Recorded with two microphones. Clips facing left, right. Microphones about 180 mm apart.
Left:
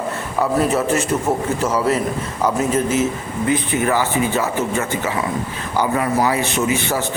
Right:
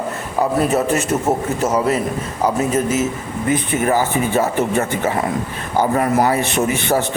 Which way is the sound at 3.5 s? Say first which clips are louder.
Right 1 dB; 45° right (ahead or behind).